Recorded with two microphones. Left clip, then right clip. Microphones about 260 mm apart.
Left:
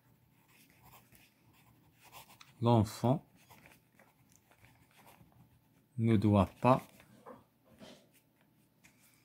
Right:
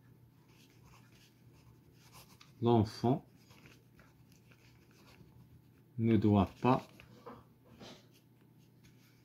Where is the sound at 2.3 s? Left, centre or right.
Left.